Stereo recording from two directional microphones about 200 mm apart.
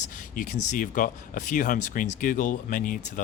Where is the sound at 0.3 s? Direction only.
40° left (ahead or behind).